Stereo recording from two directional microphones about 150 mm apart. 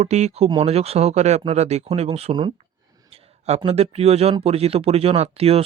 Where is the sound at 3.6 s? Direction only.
40° right (ahead or behind).